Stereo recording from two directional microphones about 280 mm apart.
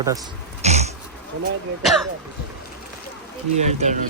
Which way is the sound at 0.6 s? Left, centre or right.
Right.